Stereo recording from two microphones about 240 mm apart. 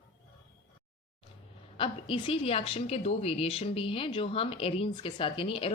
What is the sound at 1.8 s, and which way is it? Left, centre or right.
A woman's voice, left.